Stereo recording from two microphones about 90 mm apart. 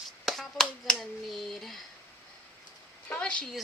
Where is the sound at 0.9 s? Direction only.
Centre (ahead or behind).